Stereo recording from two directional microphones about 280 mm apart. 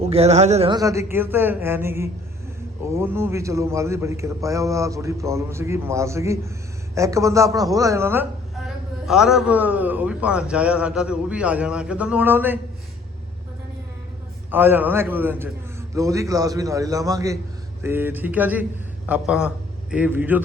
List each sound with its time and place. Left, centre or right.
0.0 s a man's voice: right
14.5 s a man's voice: centre